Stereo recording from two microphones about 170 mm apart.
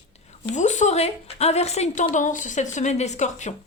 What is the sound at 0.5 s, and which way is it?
A woman's voice, 45° left (ahead or behind).